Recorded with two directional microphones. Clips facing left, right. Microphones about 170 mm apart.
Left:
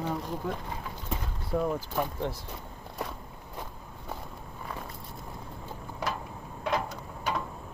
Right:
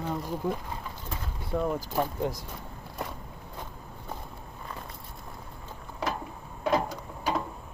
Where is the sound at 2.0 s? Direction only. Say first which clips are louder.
Right 4 dB; 15° right (ahead or behind).